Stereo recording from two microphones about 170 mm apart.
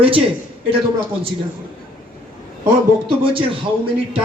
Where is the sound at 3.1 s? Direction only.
30° right (ahead or behind).